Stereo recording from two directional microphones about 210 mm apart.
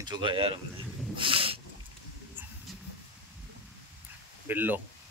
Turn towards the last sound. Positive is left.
turn(degrees=-10)  # may be behind; listen again after turning